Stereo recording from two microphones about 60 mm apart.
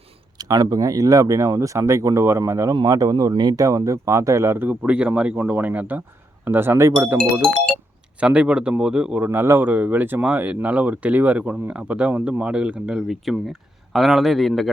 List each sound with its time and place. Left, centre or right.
0.3 s speech: right
1.5 s speech: right
2.6 s speech: right
4.5 s speech: right
4.8 s speech: centre; by 6.8 s right
6.8 s speech: right
7.4 s music: centre
8.2 s speech: centre
9.2 s speech: right
9.6 s speech: right
13.1 s a man's voice: centre